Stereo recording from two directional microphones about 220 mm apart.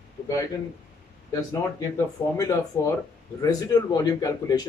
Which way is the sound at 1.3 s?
15° left (ahead or behind).